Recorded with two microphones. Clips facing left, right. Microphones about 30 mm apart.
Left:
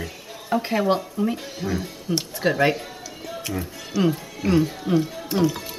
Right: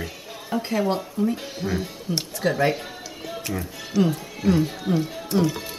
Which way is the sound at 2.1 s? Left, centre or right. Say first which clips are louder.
Left 3 dB; left.